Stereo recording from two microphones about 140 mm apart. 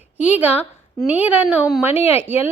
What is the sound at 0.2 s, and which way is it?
A woman's voice, 10° right (ahead or behind).